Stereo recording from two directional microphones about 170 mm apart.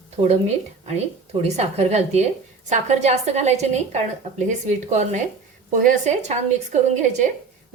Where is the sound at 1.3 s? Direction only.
40° right (ahead or behind).